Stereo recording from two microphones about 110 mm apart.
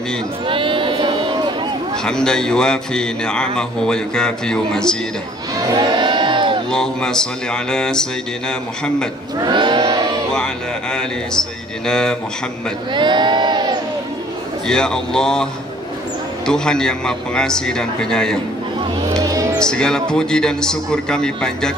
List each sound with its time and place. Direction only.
0.5 s a sound: 50° right (ahead or behind)
2.0 s a man's voice: 5° left (ahead or behind)
5.7 s crowd: 45° right (ahead or behind)
6.7 s a man's voice: 5° left (ahead or behind)
9.4 s a sound: 45° right (ahead or behind)
10.3 s a man's voice: 5° left (ahead or behind)
12.9 s crowd: 45° right (ahead or behind)
14.7 s a man's voice: 5° left (ahead or behind)
16.4 s a man's voice: 5° left (ahead or behind)
19.1 s music: 30° right (ahead or behind)
19.6 s a man's voice: 5° left (ahead or behind)